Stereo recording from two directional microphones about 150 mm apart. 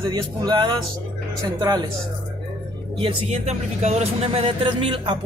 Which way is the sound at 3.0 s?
40° right (ahead or behind).